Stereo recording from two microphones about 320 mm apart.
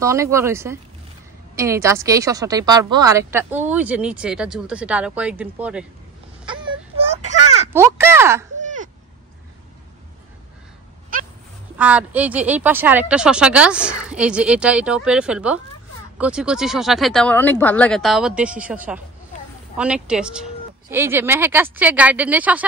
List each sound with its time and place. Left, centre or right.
0.0 s a woman's voice: centre
6.4 s wail: centre
7.7 s speech: centre
8.5 s a sound: right
11.1 s goat: right
11.7 s a woman's voice: centre